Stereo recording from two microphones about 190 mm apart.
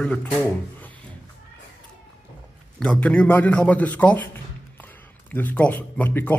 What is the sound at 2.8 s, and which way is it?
A man's voice, 5° left (ahead or behind).